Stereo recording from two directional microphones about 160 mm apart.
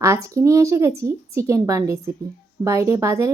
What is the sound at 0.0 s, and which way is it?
A woman's voice, 20° right (ahead or behind).